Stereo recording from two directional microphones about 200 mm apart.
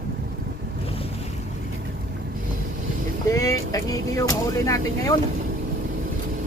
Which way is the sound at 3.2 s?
15° left (ahead or behind).